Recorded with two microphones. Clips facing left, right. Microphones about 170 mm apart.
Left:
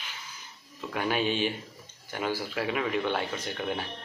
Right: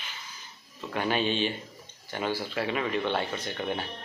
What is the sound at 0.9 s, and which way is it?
Speech, 5° left (ahead or behind).